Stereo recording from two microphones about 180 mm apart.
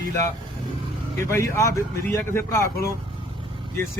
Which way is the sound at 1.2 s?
15° left (ahead or behind).